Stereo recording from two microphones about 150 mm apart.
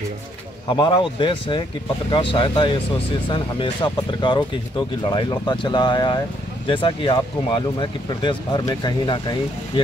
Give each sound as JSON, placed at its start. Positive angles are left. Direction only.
{"t": 0.7, "sound": "speech", "side_deg": 30}